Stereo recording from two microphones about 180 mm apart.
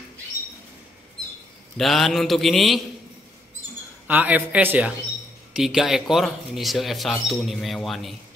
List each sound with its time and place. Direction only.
1.8 s speech: centre (ahead or behind)
4.1 s speech: 10° right (ahead or behind)